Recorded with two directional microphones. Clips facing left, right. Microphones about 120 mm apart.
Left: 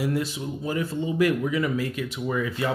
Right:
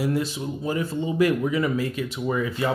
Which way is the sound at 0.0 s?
25° right (ahead or behind).